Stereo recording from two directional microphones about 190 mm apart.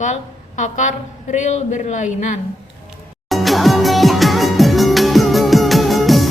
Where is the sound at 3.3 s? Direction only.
Centre (ahead or behind).